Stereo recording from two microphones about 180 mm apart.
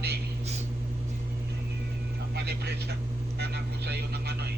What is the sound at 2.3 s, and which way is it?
Speech, 65° right (ahead or behind).